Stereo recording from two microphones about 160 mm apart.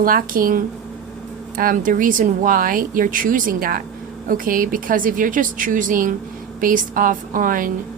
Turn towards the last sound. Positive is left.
turn(degrees=-60)  # may be behind; listen again after turning